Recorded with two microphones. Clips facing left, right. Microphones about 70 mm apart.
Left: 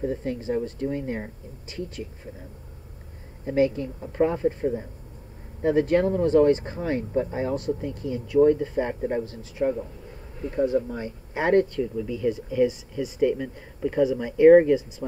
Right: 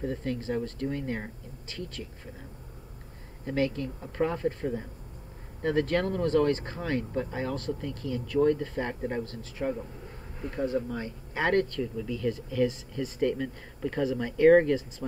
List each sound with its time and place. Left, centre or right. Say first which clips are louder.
0.0 s speech: left 4 dB; centre
3.4 s speech: left 6 dB; centre